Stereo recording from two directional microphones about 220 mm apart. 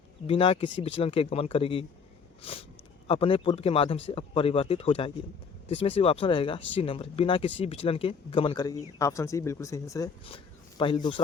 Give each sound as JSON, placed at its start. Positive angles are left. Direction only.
{"t": 0.3, "sound": "speech", "side_deg": 25}